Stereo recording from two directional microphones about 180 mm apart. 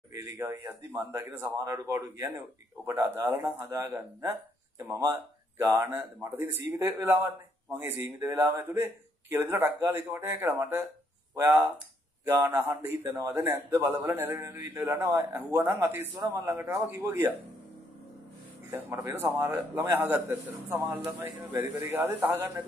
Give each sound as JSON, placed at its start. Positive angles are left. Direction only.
{"t": 0.1, "sound": "a man's voice", "side_deg": -15}
{"t": 18.7, "sound": "a man's voice", "side_deg": -15}